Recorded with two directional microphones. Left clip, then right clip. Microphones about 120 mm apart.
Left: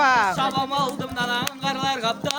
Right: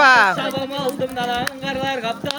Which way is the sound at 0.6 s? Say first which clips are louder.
Right 1 dB; 45° left (ahead or behind).